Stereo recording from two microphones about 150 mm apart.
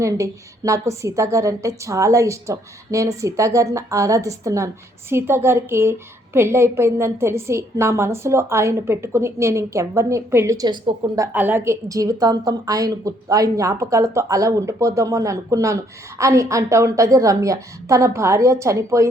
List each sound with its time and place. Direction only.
0.0 s a woman's voice: 20° right (ahead or behind)
11.3 s a woman's voice: 10° right (ahead or behind)